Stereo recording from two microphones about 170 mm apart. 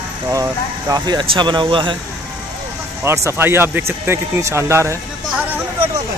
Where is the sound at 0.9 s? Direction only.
25° right (ahead or behind).